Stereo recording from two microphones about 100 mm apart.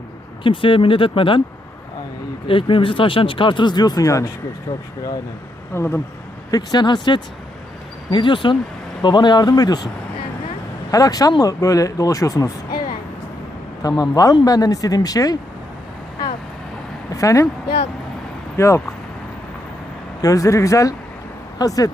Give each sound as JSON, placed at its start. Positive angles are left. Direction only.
{"t": 0.4, "sound": "speech", "side_deg": 60}
{"t": 2.5, "sound": "speech", "side_deg": 60}
{"t": 5.7, "sound": "speech", "side_deg": 25}
{"t": 6.5, "sound": "speech", "side_deg": 45}
{"t": 10.9, "sound": "speech", "side_deg": 35}
{"t": 17.2, "sound": "speech", "side_deg": 35}
{"t": 18.5, "sound": "speech", "side_deg": 25}
{"t": 20.2, "sound": "speech", "side_deg": 35}